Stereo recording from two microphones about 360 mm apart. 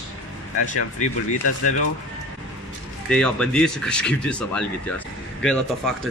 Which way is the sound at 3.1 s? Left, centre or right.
Centre.